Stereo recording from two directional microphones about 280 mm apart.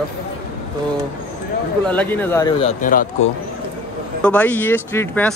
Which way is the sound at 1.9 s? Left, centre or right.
Centre.